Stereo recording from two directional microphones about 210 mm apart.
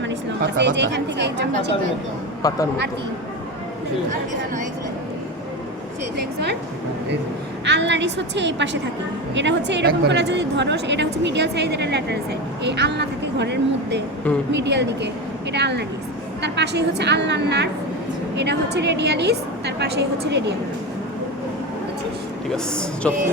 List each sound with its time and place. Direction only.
0.6 s a woman's voice: 60° right (ahead or behind)
2.4 s speech: 15° left (ahead or behind)
6.1 s a woman's voice: 55° right (ahead or behind)
7.6 s a woman's voice: 55° right (ahead or behind)
23.0 s speech: 5° left (ahead or behind)